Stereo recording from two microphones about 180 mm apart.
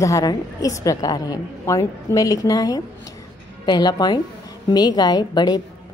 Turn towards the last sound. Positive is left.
turn(degrees=25)  # may be behind; listen again after turning